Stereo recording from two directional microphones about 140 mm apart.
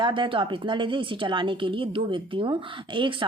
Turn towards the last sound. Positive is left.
turn(degrees=-35)  # may be behind; listen again after turning